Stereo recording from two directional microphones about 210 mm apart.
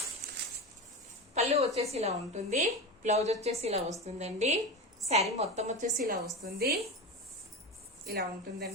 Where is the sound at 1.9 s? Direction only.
30° right (ahead or behind); by 6.7 s 45° right (ahead or behind).